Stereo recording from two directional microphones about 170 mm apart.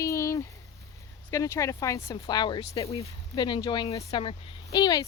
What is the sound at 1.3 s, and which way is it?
Speech, 15° left (ahead or behind).